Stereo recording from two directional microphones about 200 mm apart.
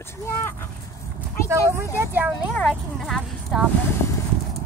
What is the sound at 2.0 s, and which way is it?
Speech, 10° right (ahead or behind).